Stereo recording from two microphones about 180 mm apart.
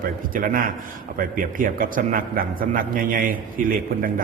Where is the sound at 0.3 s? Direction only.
50° right (ahead or behind).